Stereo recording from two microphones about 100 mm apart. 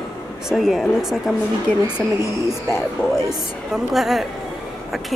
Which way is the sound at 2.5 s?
25° left (ahead or behind).